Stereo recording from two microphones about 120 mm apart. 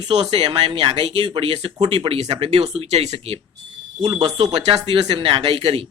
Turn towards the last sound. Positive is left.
turn(degrees=-50)  # may be behind; listen again after turning